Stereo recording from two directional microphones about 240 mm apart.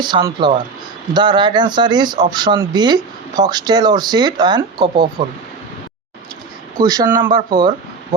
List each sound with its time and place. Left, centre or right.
0.0 s speech: centre
6.8 s speech: centre